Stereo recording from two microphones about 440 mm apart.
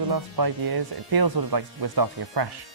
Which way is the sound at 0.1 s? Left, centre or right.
Right.